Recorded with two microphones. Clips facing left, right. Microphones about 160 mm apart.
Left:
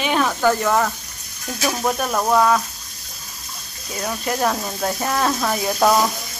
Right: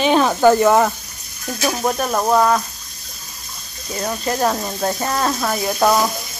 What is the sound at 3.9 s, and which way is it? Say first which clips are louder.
Speech: right 2 dB; 5° left (ahead or behind).